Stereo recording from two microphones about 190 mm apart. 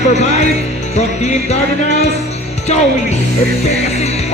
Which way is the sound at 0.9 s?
35° left (ahead or behind).